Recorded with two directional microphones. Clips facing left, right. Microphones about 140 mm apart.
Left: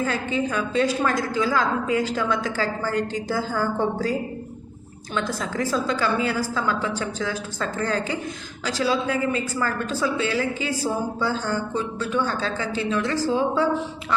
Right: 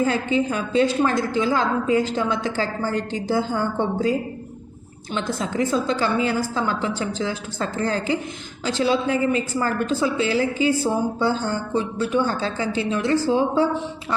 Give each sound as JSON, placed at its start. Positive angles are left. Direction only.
{"t": 0.0, "sound": "a woman's voice", "side_deg": -30}
{"t": 5.1, "sound": "a woman's voice", "side_deg": -25}